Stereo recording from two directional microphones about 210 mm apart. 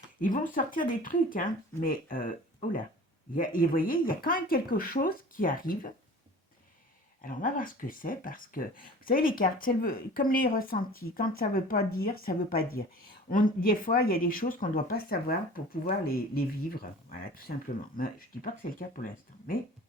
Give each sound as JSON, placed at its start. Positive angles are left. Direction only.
{"t": 0.2, "sound": "speech", "side_deg": 40}
{"t": 7.2, "sound": "speech", "side_deg": 40}